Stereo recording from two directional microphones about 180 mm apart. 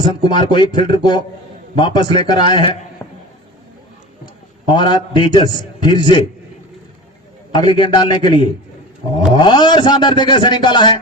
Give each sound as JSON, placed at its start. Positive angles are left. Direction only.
{"t": 0.0, "sound": "a man's voice", "side_deg": 30}
{"t": 4.7, "sound": "a man's voice", "side_deg": 25}
{"t": 7.5, "sound": "a man's voice", "side_deg": 25}